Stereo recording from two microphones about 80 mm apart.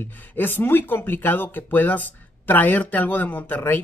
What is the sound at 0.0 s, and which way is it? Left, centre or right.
Speech, left.